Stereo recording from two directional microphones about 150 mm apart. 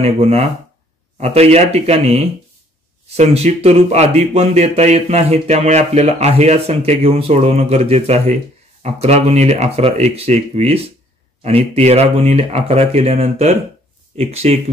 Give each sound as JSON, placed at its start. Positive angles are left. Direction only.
{"t": 0.0, "sound": "speech", "side_deg": -45}